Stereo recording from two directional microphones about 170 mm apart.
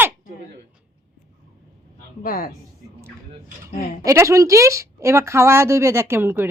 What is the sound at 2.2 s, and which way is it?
Speech, 55° left (ahead or behind).